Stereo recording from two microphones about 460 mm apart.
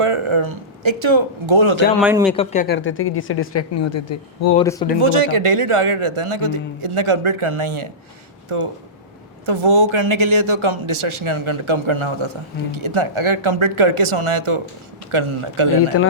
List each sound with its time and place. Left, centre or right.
0.0 s speech: right
2.0 s speech: centre
2.3 s speech: centre; by 4.0 s left
4.5 s speech: centre
4.9 s a man's voice: right
15.9 s speech: left